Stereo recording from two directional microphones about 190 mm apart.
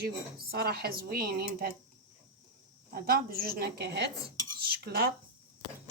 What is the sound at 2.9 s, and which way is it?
A woman's voice, 50° right (ahead or behind).